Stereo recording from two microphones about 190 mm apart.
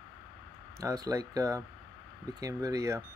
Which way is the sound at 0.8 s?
20° right (ahead or behind).